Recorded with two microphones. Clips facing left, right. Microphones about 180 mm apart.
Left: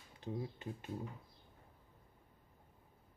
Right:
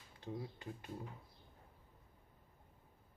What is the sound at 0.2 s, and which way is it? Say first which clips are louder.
Speech: left 3 dB; 20° left (ahead or behind).